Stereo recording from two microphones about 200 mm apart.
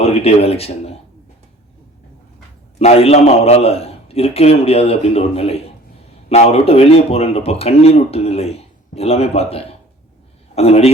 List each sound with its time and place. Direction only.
0.0 s speech: 30° left (ahead or behind)
2.7 s a man's voice: 30° left (ahead or behind)